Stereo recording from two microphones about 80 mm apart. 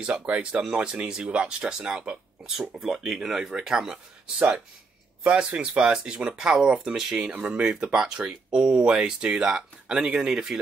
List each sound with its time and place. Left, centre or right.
0.2 s speech: centre